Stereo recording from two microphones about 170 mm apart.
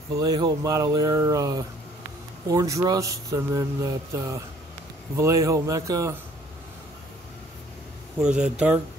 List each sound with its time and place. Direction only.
0.1 s a man's voice: 20° right (ahead or behind)
8.2 s a man's voice: 5° right (ahead or behind)